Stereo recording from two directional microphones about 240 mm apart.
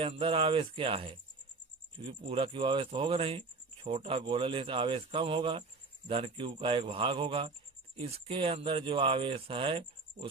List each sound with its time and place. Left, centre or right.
0.0 s speech: right